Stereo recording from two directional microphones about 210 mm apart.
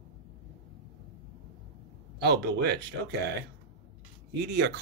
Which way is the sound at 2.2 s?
50° right (ahead or behind).